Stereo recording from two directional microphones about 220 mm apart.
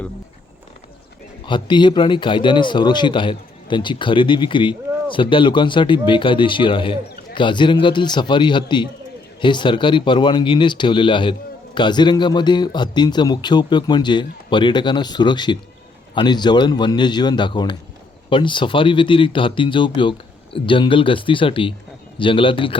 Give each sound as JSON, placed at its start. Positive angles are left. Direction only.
{"t": 1.5, "sound": "a man's voice", "side_deg": 20}